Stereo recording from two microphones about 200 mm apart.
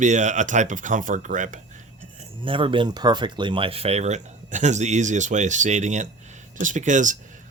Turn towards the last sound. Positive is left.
turn(degrees=-40)  # may be behind; listen again after turning